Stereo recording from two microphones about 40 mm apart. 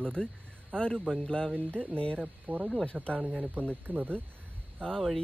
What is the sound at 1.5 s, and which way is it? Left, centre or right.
Speech, right.